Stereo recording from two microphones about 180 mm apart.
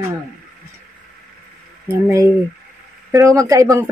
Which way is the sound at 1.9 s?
15° right (ahead or behind).